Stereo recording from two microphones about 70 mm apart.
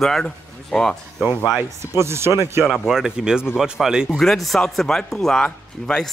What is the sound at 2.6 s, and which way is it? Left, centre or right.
Speech, centre.